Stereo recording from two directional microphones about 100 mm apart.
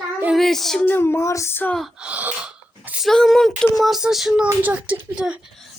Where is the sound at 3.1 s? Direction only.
5° left (ahead or behind).